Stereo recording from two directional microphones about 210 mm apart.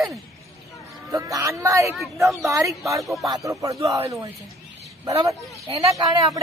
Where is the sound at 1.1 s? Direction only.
15° right (ahead or behind).